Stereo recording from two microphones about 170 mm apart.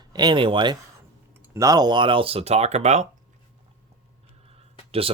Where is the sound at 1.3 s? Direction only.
15° right (ahead or behind); by 3.0 s 40° right (ahead or behind).